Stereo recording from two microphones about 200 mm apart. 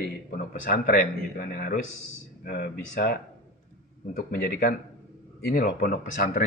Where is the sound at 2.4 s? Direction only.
55° left (ahead or behind).